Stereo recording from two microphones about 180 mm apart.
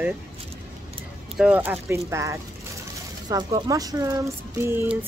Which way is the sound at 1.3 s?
5° right (ahead or behind).